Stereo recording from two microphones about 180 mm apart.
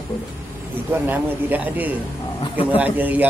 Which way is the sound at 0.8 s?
10° right (ahead or behind).